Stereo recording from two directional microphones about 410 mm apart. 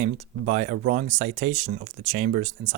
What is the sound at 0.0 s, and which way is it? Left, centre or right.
Speech, centre.